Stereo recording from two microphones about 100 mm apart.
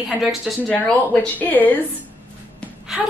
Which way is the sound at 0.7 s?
10° left (ahead or behind).